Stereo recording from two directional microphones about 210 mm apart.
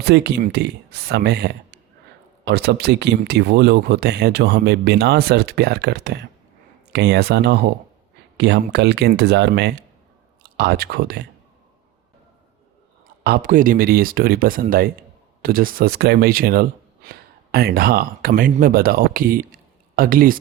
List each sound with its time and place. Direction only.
0.0 s speech: 50° right (ahead or behind)
13.2 s speech: 45° right (ahead or behind)